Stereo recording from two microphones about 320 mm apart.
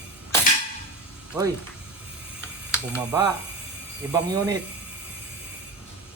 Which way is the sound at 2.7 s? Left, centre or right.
Centre.